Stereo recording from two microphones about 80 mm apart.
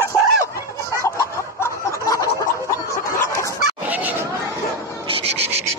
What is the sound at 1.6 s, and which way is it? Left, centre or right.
Snicker, left.